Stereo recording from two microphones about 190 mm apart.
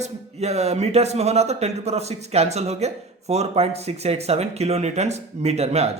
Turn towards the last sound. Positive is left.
turn(degrees=-35)  # may be behind; listen again after turning